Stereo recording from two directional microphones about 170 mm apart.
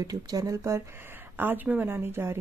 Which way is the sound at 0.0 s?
20° right (ahead or behind).